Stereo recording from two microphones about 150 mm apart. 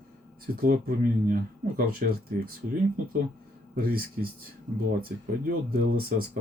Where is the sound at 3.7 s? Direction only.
90° right.